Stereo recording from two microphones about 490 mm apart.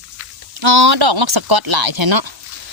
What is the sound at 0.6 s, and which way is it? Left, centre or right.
Speech, right.